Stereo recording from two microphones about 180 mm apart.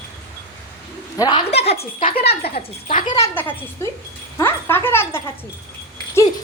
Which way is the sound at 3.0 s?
25° left (ahead or behind).